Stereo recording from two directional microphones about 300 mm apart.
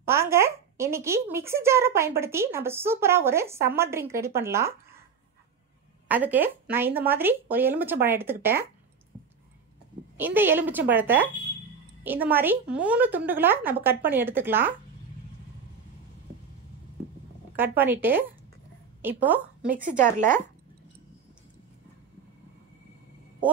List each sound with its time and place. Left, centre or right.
0.0 s speech: centre
6.0 s speech: centre
10.1 s speech: centre
17.6 s a woman's voice: centre
19.9 s speech: right